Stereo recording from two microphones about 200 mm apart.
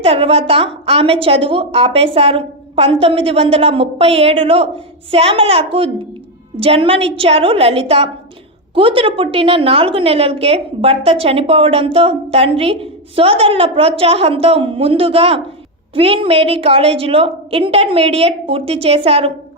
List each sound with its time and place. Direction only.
0.0 s a woman's voice: 30° right (ahead or behind)